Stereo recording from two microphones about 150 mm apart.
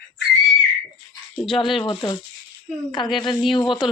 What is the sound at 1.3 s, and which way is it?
Speech, 10° left (ahead or behind).